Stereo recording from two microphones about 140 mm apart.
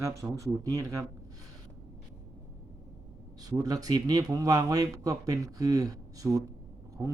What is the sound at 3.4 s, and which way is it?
Speech, 25° right (ahead or behind).